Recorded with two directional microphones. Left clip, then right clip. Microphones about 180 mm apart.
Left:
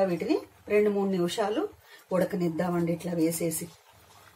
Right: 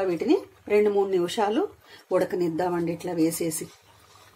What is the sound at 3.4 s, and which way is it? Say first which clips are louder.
Speech: right 2 dB; 70° right (ahead or behind).